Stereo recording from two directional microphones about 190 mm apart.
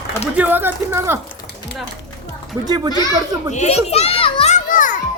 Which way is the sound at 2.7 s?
20° right (ahead or behind).